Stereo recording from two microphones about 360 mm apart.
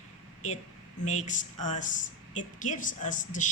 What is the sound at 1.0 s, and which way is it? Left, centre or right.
A woman's voice, centre.